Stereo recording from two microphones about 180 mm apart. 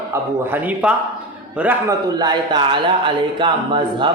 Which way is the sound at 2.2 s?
25° right (ahead or behind).